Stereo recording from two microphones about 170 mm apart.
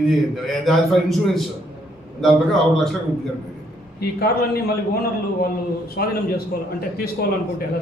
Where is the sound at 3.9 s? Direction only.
65° left (ahead or behind).